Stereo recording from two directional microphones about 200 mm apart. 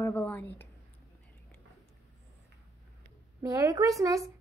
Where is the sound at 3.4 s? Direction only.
15° right (ahead or behind).